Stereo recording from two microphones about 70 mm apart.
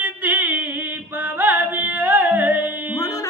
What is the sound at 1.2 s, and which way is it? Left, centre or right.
Carnatic music, right.